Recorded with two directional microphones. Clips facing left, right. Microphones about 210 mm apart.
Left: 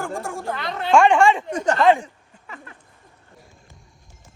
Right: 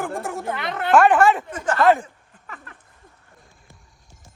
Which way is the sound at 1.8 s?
5° right (ahead or behind).